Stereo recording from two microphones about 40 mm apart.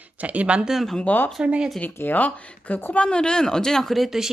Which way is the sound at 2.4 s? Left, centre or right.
Left.